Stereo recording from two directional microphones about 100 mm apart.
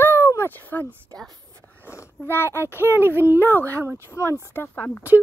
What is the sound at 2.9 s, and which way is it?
Speech, 25° right (ahead or behind).